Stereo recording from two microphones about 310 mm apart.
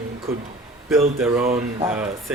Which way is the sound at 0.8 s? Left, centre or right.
Centre.